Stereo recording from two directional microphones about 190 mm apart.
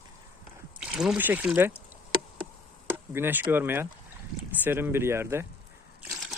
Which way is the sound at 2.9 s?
10° right (ahead or behind).